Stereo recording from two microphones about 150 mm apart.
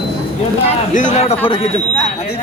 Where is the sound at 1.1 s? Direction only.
45° left (ahead or behind).